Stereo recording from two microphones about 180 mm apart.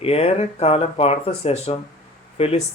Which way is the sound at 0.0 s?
35° left (ahead or behind).